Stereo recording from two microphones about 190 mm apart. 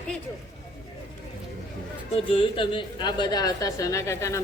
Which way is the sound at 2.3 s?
25° left (ahead or behind).